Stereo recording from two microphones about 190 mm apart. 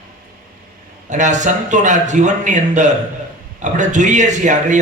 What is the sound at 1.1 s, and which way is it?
A man's voice, 40° right (ahead or behind).